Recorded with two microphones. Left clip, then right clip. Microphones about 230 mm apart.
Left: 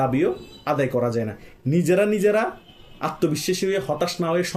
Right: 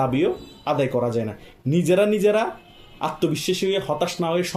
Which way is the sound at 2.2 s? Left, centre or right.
Left.